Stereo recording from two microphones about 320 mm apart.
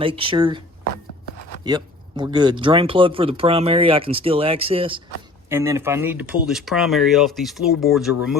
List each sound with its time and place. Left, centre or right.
0.0 s speech: centre
1.6 s speech: centre